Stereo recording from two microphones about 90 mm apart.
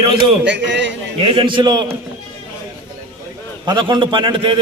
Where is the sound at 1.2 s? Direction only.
75° right (ahead or behind).